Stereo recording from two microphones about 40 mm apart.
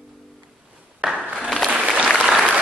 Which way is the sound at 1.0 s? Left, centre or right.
Right.